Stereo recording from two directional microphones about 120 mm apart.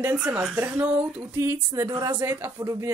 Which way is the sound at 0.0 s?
10° right (ahead or behind).